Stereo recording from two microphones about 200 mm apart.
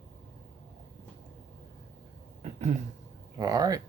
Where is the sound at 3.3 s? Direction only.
20° right (ahead or behind).